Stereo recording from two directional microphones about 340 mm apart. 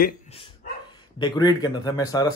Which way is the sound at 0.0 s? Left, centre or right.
Centre.